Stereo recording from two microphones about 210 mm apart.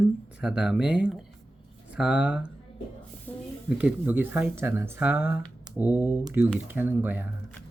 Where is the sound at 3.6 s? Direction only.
5° right (ahead or behind).